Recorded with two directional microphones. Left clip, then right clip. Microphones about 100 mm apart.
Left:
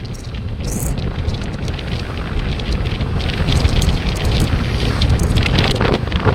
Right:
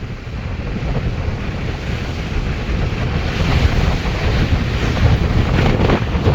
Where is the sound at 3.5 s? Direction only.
Centre (ahead or behind).